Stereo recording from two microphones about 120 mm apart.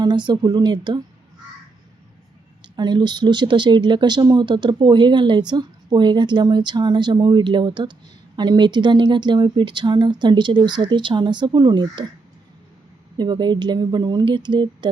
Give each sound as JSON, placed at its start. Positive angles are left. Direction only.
{"t": 0.0, "sound": "speech", "side_deg": -40}
{"t": 2.7, "sound": "speech", "side_deg": -35}
{"t": 13.1, "sound": "speech", "side_deg": -35}